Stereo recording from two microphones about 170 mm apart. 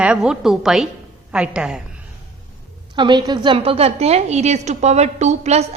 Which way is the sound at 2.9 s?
25° right (ahead or behind).